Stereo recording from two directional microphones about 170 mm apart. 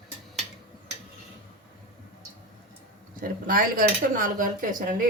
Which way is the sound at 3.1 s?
55° right (ahead or behind).